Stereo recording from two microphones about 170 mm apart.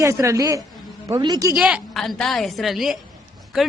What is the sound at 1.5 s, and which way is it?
A man's voice, 5° right (ahead or behind).